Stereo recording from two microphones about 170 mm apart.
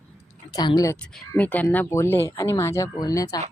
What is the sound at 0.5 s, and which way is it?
Speech, 25° left (ahead or behind).